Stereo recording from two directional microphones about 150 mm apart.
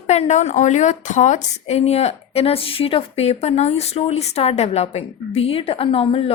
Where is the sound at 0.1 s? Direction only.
45° left (ahead or behind).